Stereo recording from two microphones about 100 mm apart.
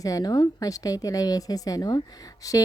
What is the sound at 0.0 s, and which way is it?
Speech, 35° left (ahead or behind).